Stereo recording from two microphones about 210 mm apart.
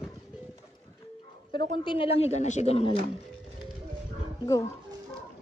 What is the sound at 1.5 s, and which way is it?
Speech, 20° left (ahead or behind).